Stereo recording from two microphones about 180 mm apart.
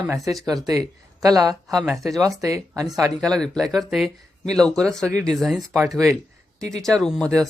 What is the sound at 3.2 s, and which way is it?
Speech, 5° left (ahead or behind).